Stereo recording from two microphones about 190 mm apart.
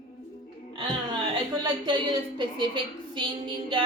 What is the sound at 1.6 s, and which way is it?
A woman's voice, 25° right (ahead or behind).